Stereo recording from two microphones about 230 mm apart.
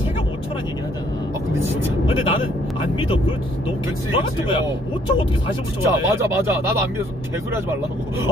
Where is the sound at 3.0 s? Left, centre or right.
Left.